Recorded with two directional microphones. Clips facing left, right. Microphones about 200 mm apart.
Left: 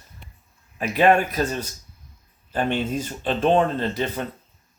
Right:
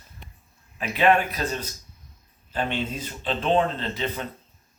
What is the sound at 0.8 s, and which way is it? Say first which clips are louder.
Speech: left 3 dB; 45° left (ahead or behind).